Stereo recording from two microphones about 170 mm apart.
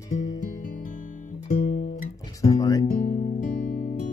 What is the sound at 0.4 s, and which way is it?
Guitar, 50° left (ahead or behind).